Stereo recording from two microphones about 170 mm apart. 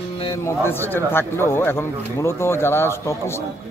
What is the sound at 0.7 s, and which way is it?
A man's voice, 15° left (ahead or behind).